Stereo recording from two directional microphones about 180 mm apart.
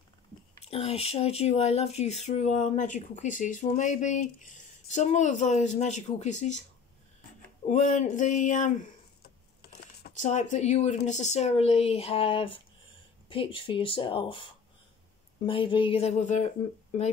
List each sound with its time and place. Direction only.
0.7 s speech: 35° left (ahead or behind)
7.6 s a sound: 40° left (ahead or behind)
9.6 s computer keyboard: 60° left (ahead or behind)
10.1 s speech: 40° left (ahead or behind)